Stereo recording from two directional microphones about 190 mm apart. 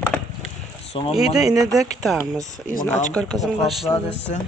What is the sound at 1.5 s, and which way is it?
Speech, 20° right (ahead or behind).